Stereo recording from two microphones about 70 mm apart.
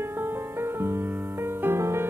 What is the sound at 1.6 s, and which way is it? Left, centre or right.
Music, right.